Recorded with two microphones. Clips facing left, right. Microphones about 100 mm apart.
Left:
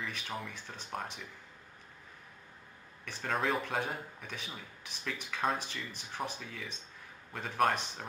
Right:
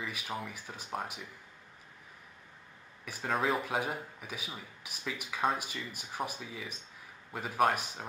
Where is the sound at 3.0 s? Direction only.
10° right (ahead or behind).